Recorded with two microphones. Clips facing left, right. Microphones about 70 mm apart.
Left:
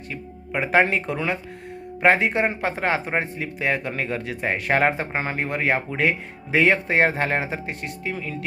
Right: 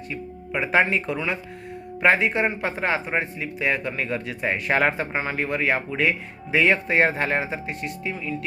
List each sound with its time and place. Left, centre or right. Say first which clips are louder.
0.6 s speech: left 1 dB; left
4.9 s speech: even; left